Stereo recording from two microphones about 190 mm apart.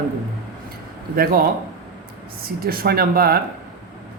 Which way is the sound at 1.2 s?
50° right (ahead or behind).